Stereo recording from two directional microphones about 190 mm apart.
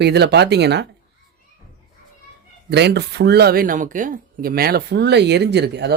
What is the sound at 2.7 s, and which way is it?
Speech, 60° right (ahead or behind).